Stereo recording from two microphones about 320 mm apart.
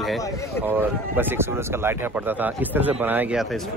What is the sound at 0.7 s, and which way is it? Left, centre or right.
Speech, centre.